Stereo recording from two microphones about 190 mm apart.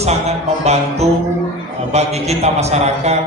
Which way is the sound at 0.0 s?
35° right (ahead or behind).